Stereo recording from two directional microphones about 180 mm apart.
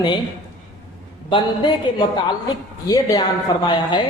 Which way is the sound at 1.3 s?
25° left (ahead or behind).